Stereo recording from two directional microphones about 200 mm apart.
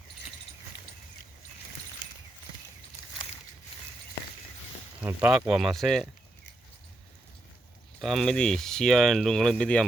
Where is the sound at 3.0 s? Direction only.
15° left (ahead or behind).